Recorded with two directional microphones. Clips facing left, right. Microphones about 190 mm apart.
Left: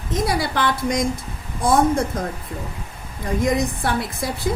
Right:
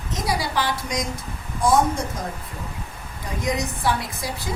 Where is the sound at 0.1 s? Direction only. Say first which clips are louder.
Left 3 dB; 55° left (ahead or behind).